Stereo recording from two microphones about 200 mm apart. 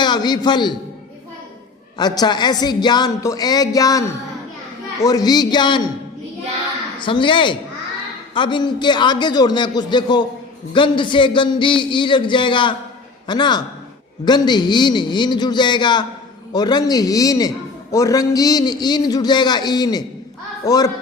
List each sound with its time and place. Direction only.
0.0 s a man's voice: 20° left (ahead or behind)
2.0 s a man's voice: 20° left (ahead or behind)
7.0 s a man's voice: 25° left (ahead or behind)